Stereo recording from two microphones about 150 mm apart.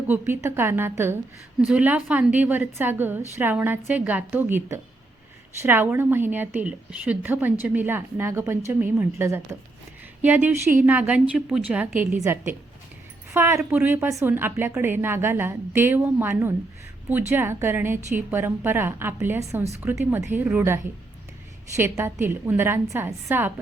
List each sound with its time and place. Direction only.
0.1 s a woman's voice: 15° right (ahead or behind)